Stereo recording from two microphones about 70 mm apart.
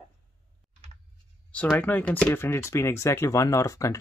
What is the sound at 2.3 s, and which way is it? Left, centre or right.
Speech, left.